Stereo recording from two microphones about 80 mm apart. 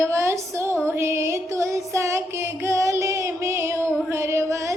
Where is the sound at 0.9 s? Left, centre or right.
Right.